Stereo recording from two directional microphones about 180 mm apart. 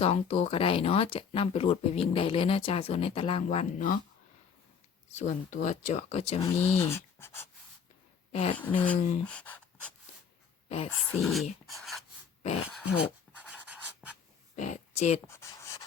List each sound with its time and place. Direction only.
0.0 s speech: 35° left (ahead or behind)
5.2 s speech: 45° left (ahead or behind)
6.4 s speech: 15° left (ahead or behind)
8.3 s speech: 35° left (ahead or behind)
8.5 s speech: 10° left (ahead or behind)
10.9 s speech: centre (ahead or behind)
11.6 s a sound: centre (ahead or behind)
12.6 s dog: 5° right (ahead or behind)
13.0 s writing: 5° right (ahead or behind)
14.5 s a sound: 40° left (ahead or behind)
15.3 s a sound: 15° left (ahead or behind)